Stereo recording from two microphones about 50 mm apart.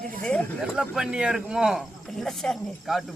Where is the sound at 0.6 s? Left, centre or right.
Centre.